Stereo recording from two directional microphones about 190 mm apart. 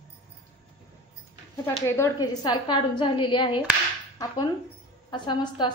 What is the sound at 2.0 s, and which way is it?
A woman's voice, 20° left (ahead or behind).